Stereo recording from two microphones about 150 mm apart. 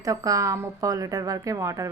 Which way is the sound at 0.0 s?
25° right (ahead or behind).